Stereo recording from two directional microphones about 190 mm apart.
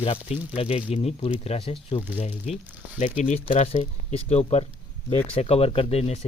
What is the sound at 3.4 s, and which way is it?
Speech, 30° left (ahead or behind).